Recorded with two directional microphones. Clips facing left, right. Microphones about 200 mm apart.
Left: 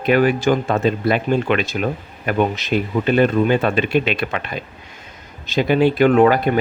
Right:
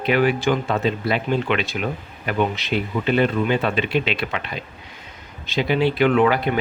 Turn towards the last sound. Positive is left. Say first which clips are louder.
# left 4 dB
turn(degrees=45)  # may be behind; listen again after turning